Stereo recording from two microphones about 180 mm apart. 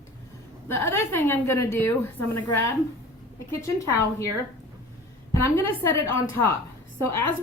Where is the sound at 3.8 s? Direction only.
15° left (ahead or behind).